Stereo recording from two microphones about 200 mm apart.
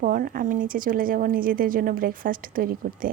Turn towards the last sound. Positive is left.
turn(degrees=-45)  # may be behind; listen again after turning